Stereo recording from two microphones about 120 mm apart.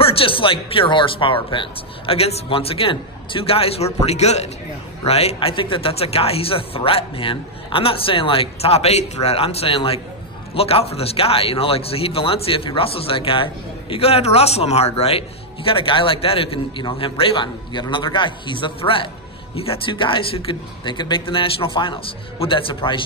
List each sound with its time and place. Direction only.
0.0 s speech: 50° left (ahead or behind)